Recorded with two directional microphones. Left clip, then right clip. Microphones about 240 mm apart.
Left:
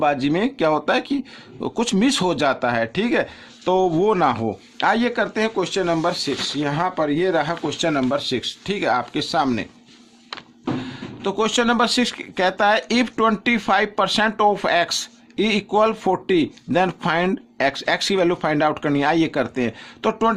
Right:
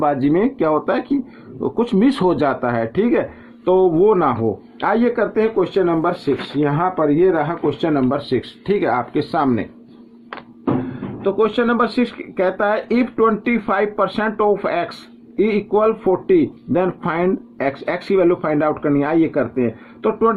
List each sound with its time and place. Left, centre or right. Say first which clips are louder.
0.0 s speech: right 3 dB; left
11.2 s speech: right 3 dB; left